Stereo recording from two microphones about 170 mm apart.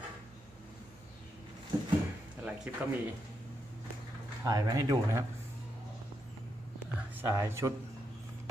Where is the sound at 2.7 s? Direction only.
10° right (ahead or behind).